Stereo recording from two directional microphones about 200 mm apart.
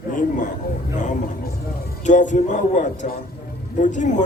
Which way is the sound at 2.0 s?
40° left (ahead or behind).